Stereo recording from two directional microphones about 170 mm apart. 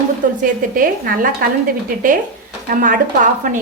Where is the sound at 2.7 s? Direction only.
50° right (ahead or behind).